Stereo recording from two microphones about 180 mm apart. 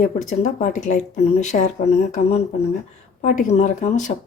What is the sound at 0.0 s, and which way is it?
Speech, 40° left (ahead or behind).